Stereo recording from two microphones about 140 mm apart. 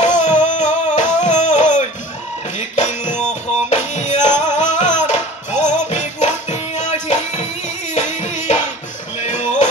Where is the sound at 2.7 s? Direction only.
55° left (ahead or behind).